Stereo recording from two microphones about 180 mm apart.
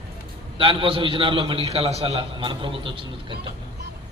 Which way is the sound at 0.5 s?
30° right (ahead or behind).